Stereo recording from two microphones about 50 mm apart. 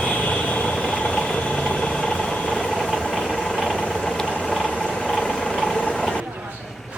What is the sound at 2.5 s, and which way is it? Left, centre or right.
Engine, centre.